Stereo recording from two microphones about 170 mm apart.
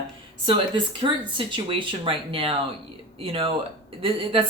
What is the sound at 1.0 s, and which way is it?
Speech, 30° right (ahead or behind).